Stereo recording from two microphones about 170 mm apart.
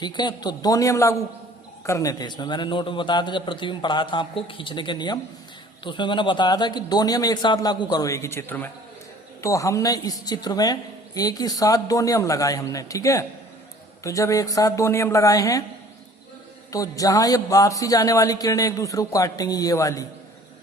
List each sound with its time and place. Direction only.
0.0 s a man's voice: 25° left (ahead or behind)
16.7 s a man's voice: 20° left (ahead or behind)